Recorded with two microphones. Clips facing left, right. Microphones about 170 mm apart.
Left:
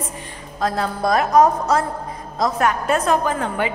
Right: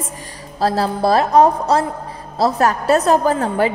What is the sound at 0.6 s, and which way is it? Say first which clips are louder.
A woman's voice: right 4 dB; 30° right (ahead or behind).